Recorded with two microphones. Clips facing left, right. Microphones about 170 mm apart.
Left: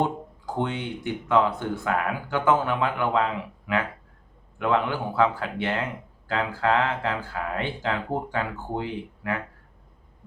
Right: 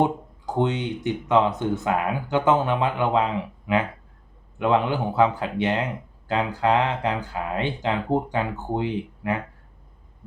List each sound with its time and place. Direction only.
0.0 s speech: 20° right (ahead or behind)